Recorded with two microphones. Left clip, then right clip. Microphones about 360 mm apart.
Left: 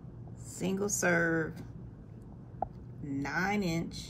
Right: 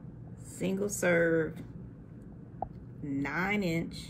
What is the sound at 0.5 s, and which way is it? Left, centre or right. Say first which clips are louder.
A woman's voice: even; centre.